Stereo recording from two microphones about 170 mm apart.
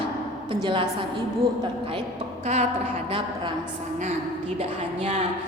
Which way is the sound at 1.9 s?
35° right (ahead or behind).